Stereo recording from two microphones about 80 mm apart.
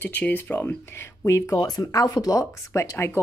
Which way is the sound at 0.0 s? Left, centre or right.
Left.